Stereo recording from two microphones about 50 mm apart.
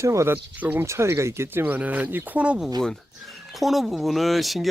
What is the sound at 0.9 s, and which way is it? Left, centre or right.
Speech, right.